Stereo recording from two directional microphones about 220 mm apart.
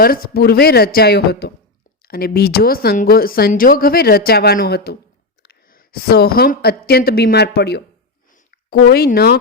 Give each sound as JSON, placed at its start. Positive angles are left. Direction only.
{"t": 0.0, "sound": "a woman's voice", "side_deg": 40}
{"t": 8.8, "sound": "speech", "side_deg": 45}